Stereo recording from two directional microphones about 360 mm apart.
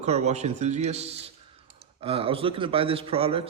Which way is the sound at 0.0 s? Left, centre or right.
Centre.